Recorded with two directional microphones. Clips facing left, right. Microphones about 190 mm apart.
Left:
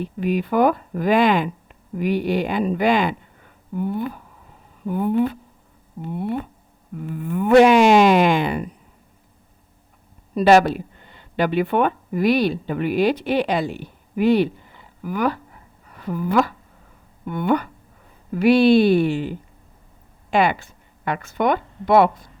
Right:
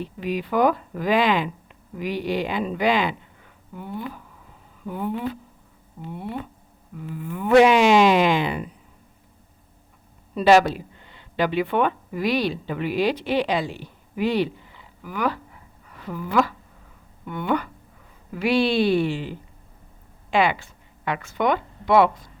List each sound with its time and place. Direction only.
0.0 s speech: 50° left (ahead or behind)
10.3 s a woman's voice: 50° left (ahead or behind)